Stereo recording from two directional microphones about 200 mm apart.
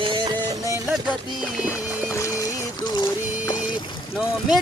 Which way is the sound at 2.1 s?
15° left (ahead or behind).